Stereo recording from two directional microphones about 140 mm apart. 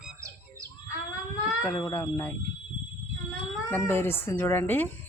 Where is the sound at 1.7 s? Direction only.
20° left (ahead or behind).